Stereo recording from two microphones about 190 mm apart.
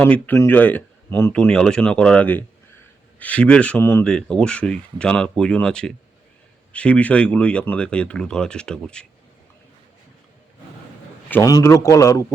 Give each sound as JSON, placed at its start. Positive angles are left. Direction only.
{"t": 0.0, "sound": "speech", "side_deg": 10}
{"t": 11.3, "sound": "speech", "side_deg": 15}